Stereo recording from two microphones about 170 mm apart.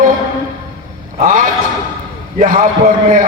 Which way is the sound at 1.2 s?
50° right (ahead or behind).